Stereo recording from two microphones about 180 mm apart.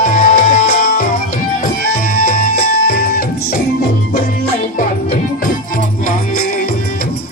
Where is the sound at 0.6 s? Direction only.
60° left (ahead or behind).